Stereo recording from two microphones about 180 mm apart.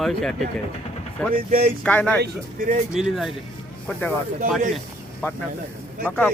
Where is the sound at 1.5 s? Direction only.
55° right (ahead or behind).